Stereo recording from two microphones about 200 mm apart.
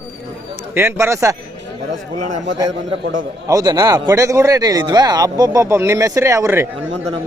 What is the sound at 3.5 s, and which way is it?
Speech, 20° right (ahead or behind).